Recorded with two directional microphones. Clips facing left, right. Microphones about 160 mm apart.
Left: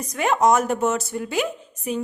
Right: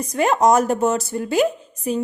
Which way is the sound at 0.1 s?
35° right (ahead or behind).